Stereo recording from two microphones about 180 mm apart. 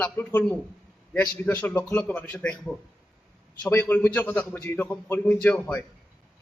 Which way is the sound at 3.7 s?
15° left (ahead or behind).